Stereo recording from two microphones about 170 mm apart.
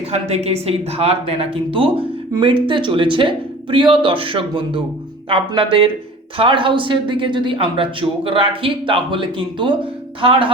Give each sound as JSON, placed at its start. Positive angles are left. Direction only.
{"t": 0.1, "sound": "speech", "side_deg": -40}